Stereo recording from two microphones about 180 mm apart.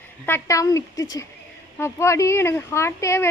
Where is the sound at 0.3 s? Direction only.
15° left (ahead or behind).